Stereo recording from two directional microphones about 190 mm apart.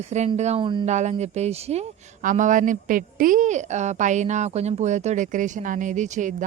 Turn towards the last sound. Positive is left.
turn(degrees=-40)  # may be behind; listen again after turning